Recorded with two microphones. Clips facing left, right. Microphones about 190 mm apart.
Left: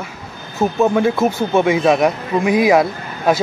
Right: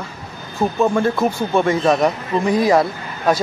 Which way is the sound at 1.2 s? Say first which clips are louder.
Left 2 dB; 20° left (ahead or behind).